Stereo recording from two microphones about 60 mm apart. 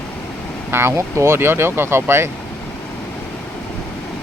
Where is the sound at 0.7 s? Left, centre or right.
Right.